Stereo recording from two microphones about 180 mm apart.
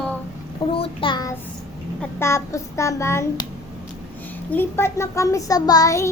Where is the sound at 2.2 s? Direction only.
15° left (ahead or behind).